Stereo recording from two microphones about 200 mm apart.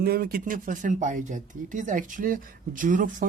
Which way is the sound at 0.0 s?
50° right (ahead or behind).